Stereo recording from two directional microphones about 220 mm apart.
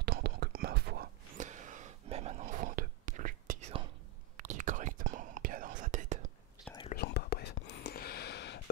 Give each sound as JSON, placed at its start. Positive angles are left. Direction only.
{"t": 0.0, "sound": "whispering", "side_deg": -45}
{"t": 6.9, "sound": "whispering", "side_deg": 45}